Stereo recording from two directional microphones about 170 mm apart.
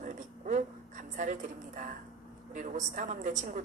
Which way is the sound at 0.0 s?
50° right (ahead or behind).